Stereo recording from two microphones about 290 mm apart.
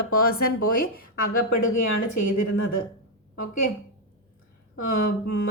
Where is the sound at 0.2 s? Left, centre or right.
Left.